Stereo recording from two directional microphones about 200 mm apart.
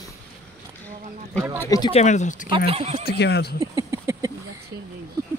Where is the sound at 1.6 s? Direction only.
15° left (ahead or behind).